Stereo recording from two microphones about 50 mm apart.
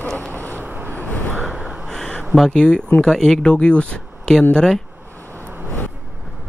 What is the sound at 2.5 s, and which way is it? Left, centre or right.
Speech, centre.